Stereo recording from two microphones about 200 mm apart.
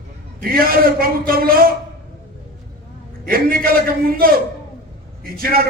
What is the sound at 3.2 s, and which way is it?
A man's voice, 45° right (ahead or behind).